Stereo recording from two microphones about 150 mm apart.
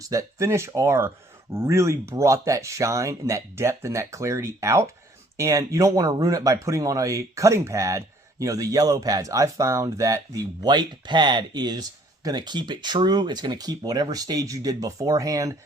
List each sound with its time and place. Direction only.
0.0 s speech: 20° right (ahead or behind)